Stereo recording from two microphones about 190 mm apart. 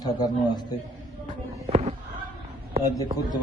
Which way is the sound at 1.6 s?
35° right (ahead or behind).